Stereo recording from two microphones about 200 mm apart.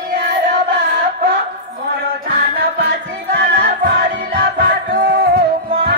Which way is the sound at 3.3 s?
55° right (ahead or behind).